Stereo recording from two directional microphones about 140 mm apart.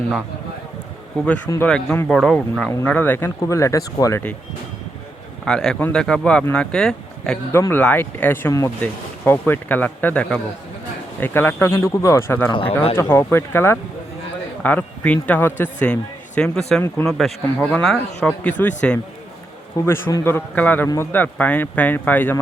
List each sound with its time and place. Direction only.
1.6 s speech: 10° left (ahead or behind)
2.0 s speech: centre (ahead or behind); by 4.2 s 25° left (ahead or behind)
5.5 s speech: 5° left (ahead or behind)
7.5 s speech: 15° left (ahead or behind)
12.5 s speech: 35° left (ahead or behind)
13.0 s speech: 20° left (ahead or behind)
19.8 s speech: 15° left (ahead or behind)